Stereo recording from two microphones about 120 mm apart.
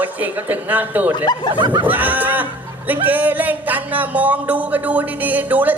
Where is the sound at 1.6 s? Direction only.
40° right (ahead or behind).